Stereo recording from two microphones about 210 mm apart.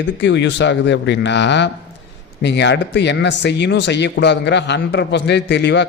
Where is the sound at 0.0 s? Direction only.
60° left (ahead or behind).